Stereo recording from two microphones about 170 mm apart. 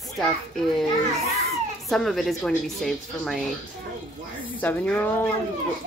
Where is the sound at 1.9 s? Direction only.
Centre (ahead or behind).